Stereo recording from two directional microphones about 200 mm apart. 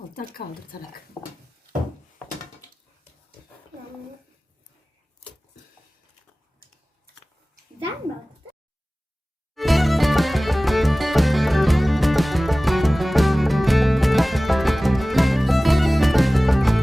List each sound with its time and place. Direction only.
0.1 s speech: 45° left (ahead or behind)
9.6 s music: centre (ahead or behind)